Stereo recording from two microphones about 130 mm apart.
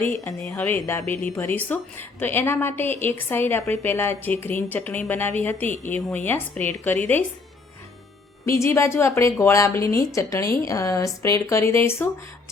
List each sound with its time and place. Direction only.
0.5 s a woman's voice: 20° left (ahead or behind)
8.4 s a woman's voice: 20° left (ahead or behind)